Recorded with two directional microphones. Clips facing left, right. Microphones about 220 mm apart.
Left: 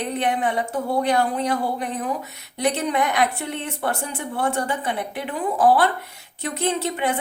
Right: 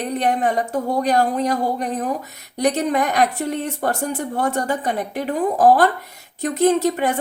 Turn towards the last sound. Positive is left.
turn(degrees=-40)  # may be behind; listen again after turning